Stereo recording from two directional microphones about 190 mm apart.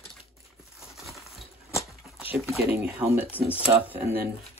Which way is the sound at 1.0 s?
Centre (ahead or behind).